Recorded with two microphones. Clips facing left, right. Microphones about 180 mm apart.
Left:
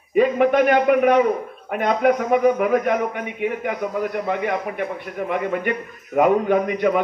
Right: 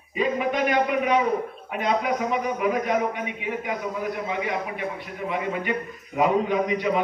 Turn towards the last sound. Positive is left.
turn(degrees=55)  # may be behind; listen again after turning